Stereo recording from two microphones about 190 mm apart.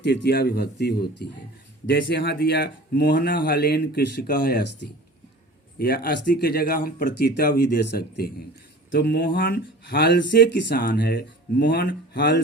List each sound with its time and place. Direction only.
0.0 s speech: 65° left (ahead or behind)